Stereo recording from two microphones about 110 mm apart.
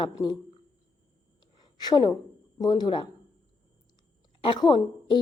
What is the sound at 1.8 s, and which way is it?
A woman's voice, 40° left (ahead or behind).